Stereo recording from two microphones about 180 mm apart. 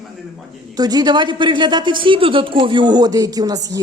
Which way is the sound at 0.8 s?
20° right (ahead or behind).